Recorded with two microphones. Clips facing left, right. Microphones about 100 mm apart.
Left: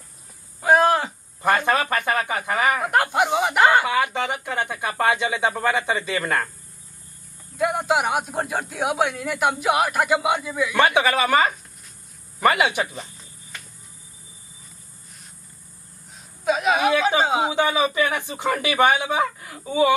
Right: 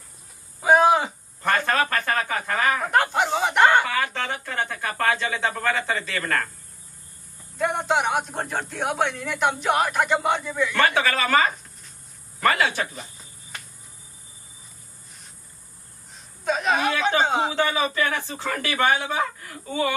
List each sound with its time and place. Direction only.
0.6 s a sound: centre (ahead or behind)
1.4 s a sound: 15° left (ahead or behind)
3.9 s speech: 15° left (ahead or behind)
7.5 s a man's voice: 5° left (ahead or behind)
16.4 s speech: 5° left (ahead or behind)
17.6 s speech: 15° left (ahead or behind)